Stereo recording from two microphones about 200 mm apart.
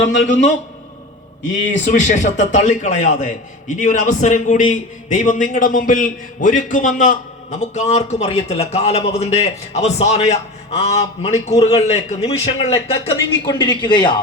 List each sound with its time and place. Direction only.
1.9 s a man's voice: 40° left (ahead or behind); by 14.2 s 20° left (ahead or behind)